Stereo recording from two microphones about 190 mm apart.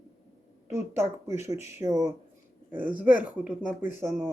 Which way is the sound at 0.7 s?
15° right (ahead or behind).